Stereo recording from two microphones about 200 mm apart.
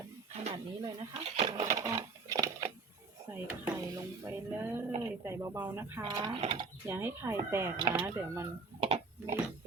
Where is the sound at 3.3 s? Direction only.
10° right (ahead or behind).